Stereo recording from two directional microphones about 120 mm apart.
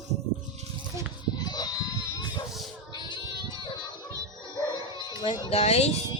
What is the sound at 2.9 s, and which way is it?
Child singing, 40° left (ahead or behind).